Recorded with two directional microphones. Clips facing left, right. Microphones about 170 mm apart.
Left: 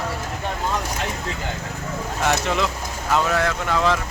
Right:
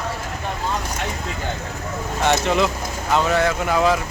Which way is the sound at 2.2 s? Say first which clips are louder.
Right 3 dB; centre (ahead or behind).